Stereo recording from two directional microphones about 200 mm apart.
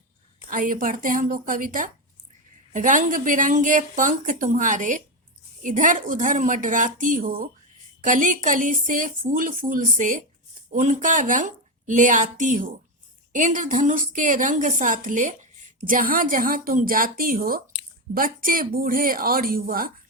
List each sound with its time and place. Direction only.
0.5 s a woman's voice: 40° right (ahead or behind)